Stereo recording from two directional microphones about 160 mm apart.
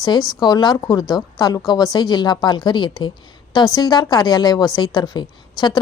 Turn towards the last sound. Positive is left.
turn(degrees=25)  # may be behind; listen again after turning